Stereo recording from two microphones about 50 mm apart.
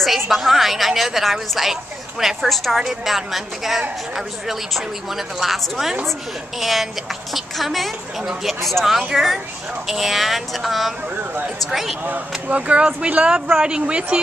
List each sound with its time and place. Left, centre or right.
0.0 s a woman's voice: centre
8.2 s speech: centre
8.6 s a woman's voice: centre
12.0 s speech: right